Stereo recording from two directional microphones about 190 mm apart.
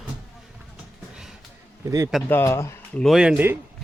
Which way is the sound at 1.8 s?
15° right (ahead or behind).